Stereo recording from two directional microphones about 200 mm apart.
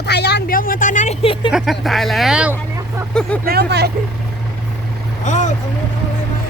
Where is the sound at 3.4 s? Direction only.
55° right (ahead or behind).